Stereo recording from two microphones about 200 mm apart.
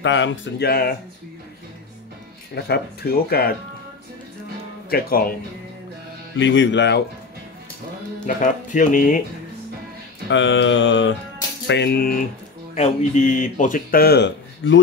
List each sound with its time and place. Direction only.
0.0 s speech: 65° left (ahead or behind); by 0.9 s 50° left (ahead or behind)
2.5 s speech: 55° left (ahead or behind)
4.8 s speech: 50° left (ahead or behind)
6.3 s speech: 65° left (ahead or behind)
8.4 s speech: 40° left (ahead or behind)
10.3 s music: 70° left (ahead or behind)
11.6 s speech: 55° left (ahead or behind)
12.7 s speech: 35° left (ahead or behind); by 14.8 s 65° left (ahead or behind)